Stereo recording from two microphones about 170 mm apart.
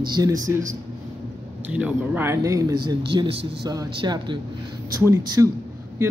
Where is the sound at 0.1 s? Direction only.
20° right (ahead or behind).